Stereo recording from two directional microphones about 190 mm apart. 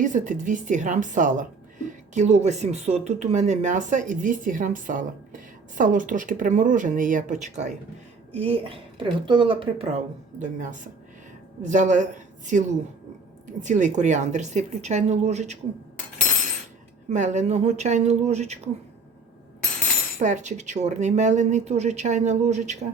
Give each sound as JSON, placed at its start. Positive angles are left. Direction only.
{"t": 0.0, "sound": "a woman's voice", "side_deg": -40}
{"t": 10.4, "sound": "a woman's voice", "side_deg": -40}
{"t": 17.1, "sound": "a woman's voice", "side_deg": -40}
{"t": 20.1, "sound": "a woman's voice", "side_deg": -40}